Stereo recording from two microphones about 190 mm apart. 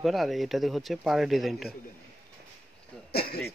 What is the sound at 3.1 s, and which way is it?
Speech, 55° left (ahead or behind).